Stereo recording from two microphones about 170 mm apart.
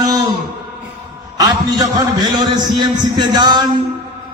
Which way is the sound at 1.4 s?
20° right (ahead or behind).